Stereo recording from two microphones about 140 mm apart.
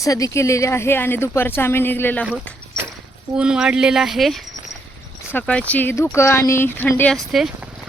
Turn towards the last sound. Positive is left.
turn(degrees=0)  # may be behind; listen again after turning